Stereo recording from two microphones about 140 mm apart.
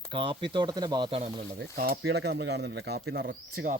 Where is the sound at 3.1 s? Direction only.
90° right.